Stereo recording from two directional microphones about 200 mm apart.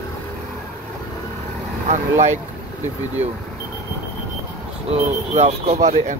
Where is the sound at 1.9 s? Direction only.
35° right (ahead or behind).